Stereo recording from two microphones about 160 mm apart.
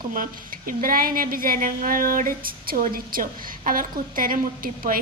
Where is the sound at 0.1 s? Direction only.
60° right (ahead or behind).